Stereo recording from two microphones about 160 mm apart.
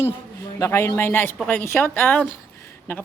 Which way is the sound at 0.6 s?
15° left (ahead or behind).